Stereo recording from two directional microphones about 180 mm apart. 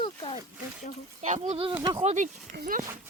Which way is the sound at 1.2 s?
40° right (ahead or behind).